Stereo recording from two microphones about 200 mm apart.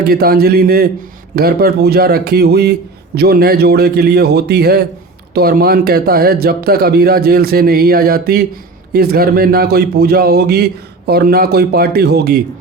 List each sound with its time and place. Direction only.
0.0 s a man's voice: 50° right (ahead or behind)